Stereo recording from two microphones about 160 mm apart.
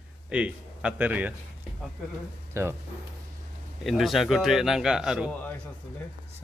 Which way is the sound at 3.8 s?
Centre (ahead or behind).